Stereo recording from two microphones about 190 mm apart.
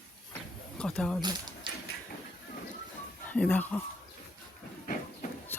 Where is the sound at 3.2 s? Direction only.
10° left (ahead or behind).